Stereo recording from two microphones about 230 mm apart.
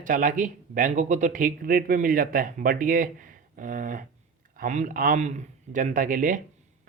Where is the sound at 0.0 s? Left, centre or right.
Right.